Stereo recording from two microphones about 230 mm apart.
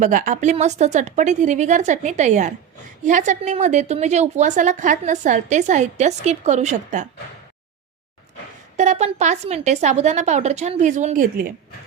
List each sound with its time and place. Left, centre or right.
0.0 s a woman's voice: right
8.7 s speech: right